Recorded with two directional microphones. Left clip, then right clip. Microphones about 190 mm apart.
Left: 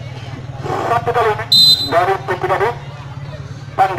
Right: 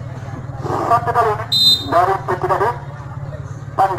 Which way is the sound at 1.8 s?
30° left (ahead or behind).